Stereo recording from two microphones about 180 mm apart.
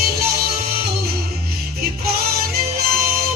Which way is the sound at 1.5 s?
60° right (ahead or behind).